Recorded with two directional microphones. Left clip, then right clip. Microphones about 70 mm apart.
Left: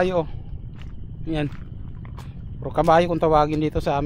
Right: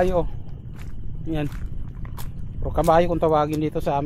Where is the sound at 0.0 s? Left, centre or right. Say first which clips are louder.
Even; left.